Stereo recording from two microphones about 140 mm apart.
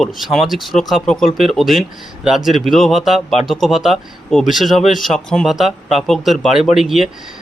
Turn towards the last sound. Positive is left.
turn(degrees=0)  # may be behind; listen again after turning